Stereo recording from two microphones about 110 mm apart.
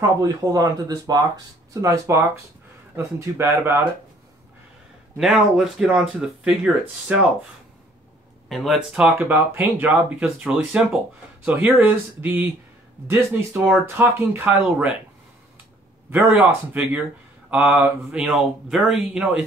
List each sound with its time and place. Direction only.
0.2 s speech: 35° right (ahead or behind)
5.1 s speech: 5° right (ahead or behind)
8.5 s speech: centre (ahead or behind)
8.7 s speech: 10° right (ahead or behind)
16.1 s speech: 15° right (ahead or behind)